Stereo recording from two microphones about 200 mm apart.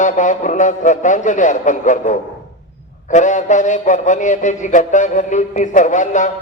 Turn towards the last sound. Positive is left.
turn(degrees=40)  # may be behind; listen again after turning